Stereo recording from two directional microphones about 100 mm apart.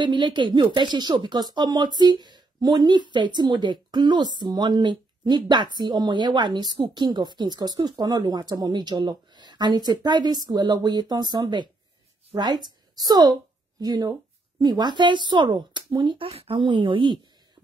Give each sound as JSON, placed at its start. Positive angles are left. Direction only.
{"t": 0.0, "sound": "a woman's voice", "side_deg": -50}
{"t": 16.3, "sound": "a woman's voice", "side_deg": -75}